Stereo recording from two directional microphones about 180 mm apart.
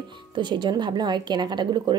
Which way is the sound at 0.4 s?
25° right (ahead or behind).